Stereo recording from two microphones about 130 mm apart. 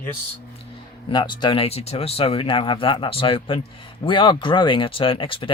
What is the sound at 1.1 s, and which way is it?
Speech, 35° left (ahead or behind).